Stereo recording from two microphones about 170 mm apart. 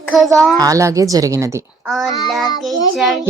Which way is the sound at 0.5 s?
20° right (ahead or behind).